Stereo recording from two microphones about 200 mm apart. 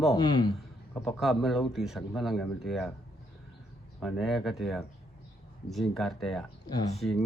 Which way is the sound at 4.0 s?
Centre (ahead or behind).